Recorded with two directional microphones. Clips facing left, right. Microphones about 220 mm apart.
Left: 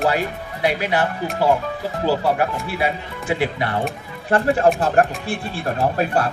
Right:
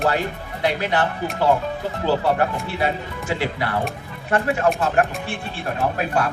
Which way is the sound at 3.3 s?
15° left (ahead or behind).